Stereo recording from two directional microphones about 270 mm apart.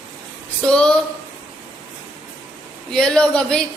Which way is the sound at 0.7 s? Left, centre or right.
Centre.